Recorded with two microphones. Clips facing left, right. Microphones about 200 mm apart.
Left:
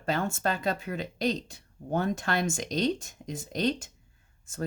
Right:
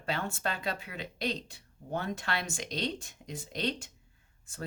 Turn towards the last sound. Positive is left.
turn(degrees=45)  # may be behind; listen again after turning